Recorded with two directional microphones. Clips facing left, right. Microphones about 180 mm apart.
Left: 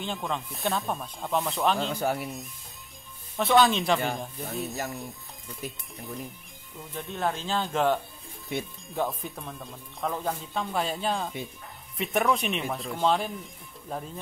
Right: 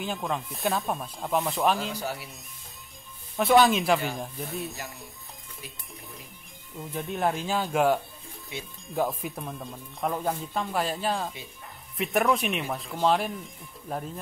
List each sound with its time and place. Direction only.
0.0 s speech: centre (ahead or behind)
2.0 s speech: 50° left (ahead or behind)
3.3 s speech: centre (ahead or behind)
6.9 s speech: 15° right (ahead or behind)
8.5 s speech: 55° left (ahead or behind)
8.8 s speech: centre (ahead or behind)